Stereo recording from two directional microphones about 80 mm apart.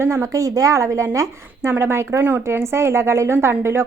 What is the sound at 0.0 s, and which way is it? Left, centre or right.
A woman's voice, right.